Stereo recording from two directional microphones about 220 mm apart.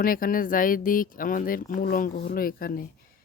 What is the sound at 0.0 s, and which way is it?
Speech, 40° left (ahead or behind).